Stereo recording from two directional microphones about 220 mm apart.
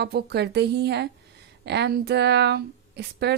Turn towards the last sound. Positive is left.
turn(degrees=-50)  # may be behind; listen again after turning